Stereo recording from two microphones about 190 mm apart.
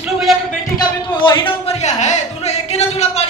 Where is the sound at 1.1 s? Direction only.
25° left (ahead or behind).